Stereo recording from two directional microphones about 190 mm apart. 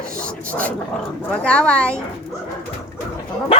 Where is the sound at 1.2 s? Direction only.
5° left (ahead or behind).